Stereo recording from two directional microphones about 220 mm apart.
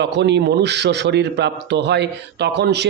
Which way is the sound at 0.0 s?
50° right (ahead or behind).